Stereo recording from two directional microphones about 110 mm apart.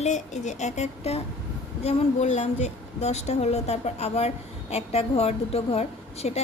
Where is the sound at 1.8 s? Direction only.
90° left.